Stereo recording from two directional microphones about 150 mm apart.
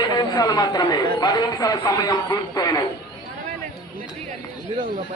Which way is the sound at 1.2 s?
25° left (ahead or behind).